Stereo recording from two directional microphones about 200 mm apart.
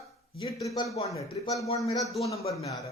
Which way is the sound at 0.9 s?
30° left (ahead or behind).